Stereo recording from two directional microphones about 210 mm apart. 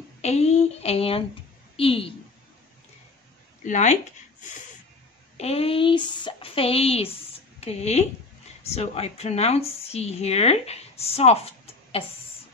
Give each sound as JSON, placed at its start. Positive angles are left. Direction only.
{"t": 0.2, "sound": "speech", "side_deg": 30}
{"t": 3.6, "sound": "speech", "side_deg": 35}
{"t": 5.4, "sound": "speech", "side_deg": 30}